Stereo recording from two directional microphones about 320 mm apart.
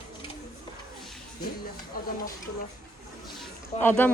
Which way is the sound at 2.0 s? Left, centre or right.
Left.